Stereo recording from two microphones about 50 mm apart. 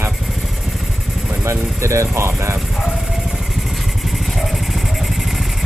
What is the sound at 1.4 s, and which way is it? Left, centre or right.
Speech, right.